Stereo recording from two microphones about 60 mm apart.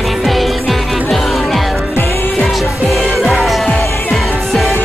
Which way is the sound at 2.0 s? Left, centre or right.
Left.